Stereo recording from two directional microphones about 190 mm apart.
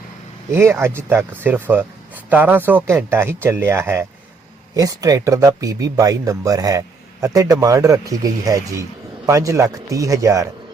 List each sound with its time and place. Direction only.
0.5 s speech: 15° right (ahead or behind)